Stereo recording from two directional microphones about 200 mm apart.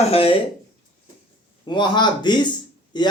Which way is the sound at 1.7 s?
20° left (ahead or behind).